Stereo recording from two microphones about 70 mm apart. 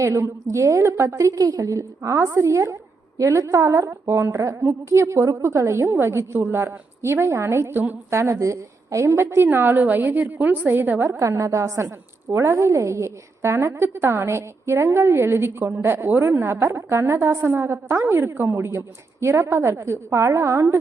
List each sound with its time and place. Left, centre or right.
0.0 s a woman's voice: right
2.0 s a woman's voice: right
11.2 s a woman's voice: right